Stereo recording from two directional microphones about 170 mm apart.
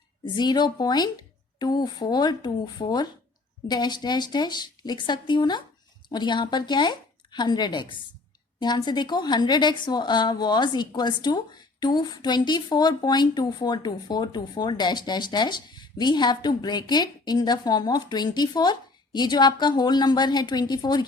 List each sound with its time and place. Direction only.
0.3 s a woman's voice: 25° left (ahead or behind)